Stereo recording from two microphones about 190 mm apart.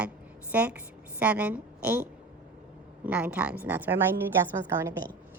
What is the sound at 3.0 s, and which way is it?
A woman's voice, 5° right (ahead or behind).